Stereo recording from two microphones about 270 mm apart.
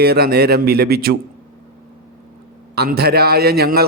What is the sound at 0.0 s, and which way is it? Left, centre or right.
A man's voice, right.